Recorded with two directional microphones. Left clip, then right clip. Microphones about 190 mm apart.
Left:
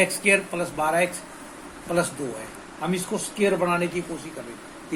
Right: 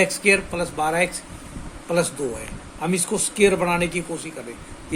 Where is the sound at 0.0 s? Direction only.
45° right (ahead or behind).